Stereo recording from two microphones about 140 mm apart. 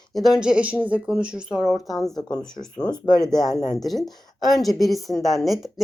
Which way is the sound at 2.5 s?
30° left (ahead or behind).